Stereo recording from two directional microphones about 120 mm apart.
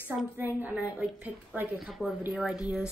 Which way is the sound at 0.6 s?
15° right (ahead or behind).